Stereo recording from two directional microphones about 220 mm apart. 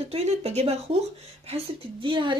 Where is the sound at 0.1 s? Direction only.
30° right (ahead or behind).